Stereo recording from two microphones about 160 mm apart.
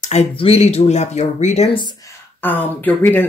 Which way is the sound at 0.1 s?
40° left (ahead or behind).